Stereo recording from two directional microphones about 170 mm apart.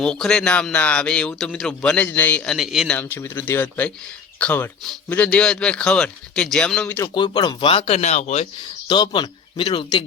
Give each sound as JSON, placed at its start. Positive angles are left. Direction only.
{"t": 0.0, "sound": "a man's voice", "side_deg": 5}
{"t": 7.1, "sound": "speech", "side_deg": 25}
{"t": 8.9, "sound": "a man's voice", "side_deg": 25}